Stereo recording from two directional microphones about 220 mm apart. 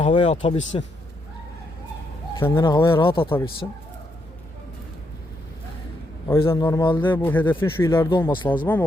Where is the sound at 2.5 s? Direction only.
20° left (ahead or behind).